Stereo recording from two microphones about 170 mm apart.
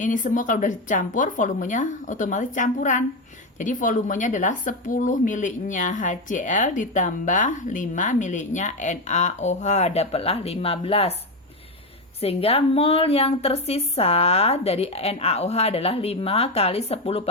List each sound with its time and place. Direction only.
0.0 s speech: 50° left (ahead or behind)
12.2 s a woman's voice: 35° left (ahead or behind)